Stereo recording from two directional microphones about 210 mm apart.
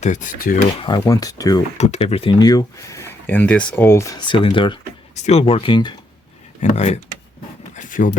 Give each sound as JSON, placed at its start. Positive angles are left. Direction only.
{"t": 0.0, "sound": "speech", "side_deg": 35}
{"t": 0.8, "sound": "speech", "side_deg": 25}
{"t": 1.8, "sound": "speech", "side_deg": 30}
{"t": 7.8, "sound": "a sound", "side_deg": 40}